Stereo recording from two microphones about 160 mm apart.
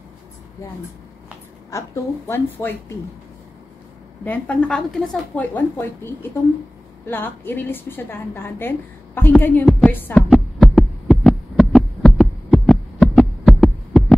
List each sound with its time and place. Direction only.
1.7 s a woman's voice: 20° left (ahead or behind)
4.2 s a woman's voice: 10° left (ahead or behind)
9.7 s music: centre (ahead or behind)
9.9 s heart sounds: 10° left (ahead or behind)